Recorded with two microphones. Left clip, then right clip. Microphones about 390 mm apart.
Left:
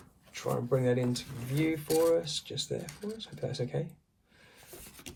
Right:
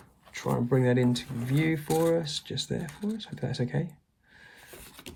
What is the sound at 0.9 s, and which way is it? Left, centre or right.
Speech, right.